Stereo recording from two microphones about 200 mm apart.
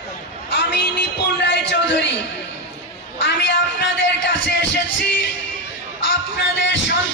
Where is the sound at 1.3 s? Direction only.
60° left (ahead or behind).